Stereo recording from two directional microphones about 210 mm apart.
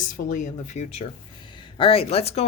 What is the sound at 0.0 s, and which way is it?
A woman's voice, 40° left (ahead or behind).